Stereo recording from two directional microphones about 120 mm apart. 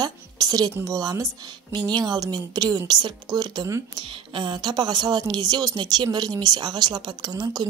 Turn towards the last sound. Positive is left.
turn(degrees=-35)  # may be behind; listen again after turning